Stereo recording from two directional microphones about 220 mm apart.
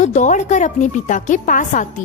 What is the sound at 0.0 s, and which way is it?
A child's voice, 35° left (ahead or behind).